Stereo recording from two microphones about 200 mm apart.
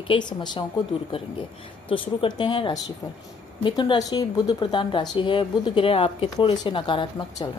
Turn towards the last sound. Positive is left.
turn(degrees=25)  # may be behind; listen again after turning